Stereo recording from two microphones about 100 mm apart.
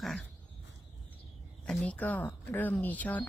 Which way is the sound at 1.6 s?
10° left (ahead or behind).